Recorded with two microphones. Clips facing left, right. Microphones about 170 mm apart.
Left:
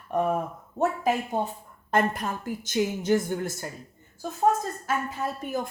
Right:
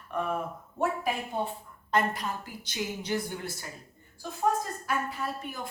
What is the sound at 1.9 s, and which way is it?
A woman's voice, 50° left (ahead or behind).